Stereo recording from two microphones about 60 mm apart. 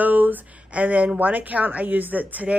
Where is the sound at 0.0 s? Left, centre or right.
Right.